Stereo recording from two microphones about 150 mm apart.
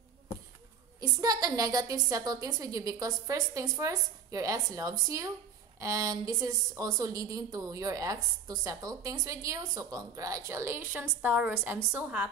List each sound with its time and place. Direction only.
1.0 s a woman's voice: 25° right (ahead or behind)